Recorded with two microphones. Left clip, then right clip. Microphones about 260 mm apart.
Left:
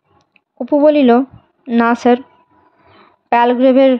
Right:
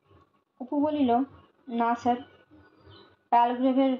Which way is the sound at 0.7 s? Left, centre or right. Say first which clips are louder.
Left 16 dB; left.